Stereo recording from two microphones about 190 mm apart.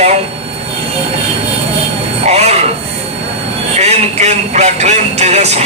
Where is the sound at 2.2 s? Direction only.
35° right (ahead or behind).